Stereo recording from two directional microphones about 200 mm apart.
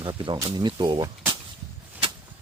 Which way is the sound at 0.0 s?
25° right (ahead or behind).